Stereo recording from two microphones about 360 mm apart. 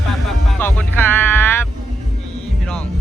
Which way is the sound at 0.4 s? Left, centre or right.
Centre.